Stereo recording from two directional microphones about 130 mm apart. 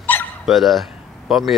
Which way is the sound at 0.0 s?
15° left (ahead or behind).